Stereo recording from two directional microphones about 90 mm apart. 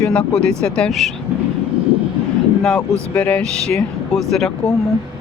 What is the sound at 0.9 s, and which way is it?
Speech, centre (ahead or behind).